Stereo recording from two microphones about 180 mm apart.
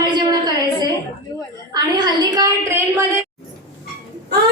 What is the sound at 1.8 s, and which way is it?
A woman's voice, 20° right (ahead or behind).